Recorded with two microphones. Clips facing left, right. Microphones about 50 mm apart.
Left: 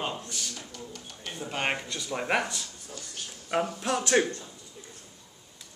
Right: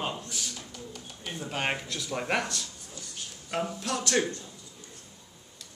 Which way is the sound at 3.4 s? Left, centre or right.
Left.